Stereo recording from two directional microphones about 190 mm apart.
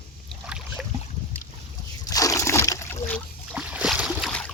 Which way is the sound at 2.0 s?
15° left (ahead or behind).